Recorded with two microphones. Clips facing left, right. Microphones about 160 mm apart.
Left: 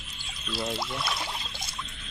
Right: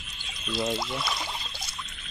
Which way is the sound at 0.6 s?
Centre (ahead or behind).